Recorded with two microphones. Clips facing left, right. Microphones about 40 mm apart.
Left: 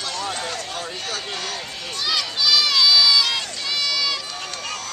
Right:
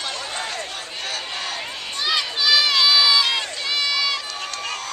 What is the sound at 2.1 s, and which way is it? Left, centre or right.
Crowd, centre.